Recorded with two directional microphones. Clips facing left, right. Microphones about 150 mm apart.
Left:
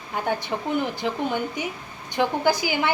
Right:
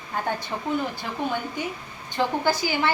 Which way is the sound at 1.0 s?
15° left (ahead or behind).